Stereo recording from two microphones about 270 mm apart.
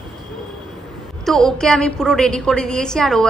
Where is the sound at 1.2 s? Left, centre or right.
Centre.